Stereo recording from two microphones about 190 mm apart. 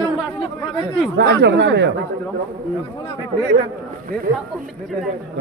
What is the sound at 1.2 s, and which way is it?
Speech, 65° right (ahead or behind).